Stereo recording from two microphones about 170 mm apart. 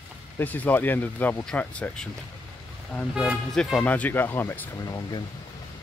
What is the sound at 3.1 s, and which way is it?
Speech, 5° right (ahead or behind).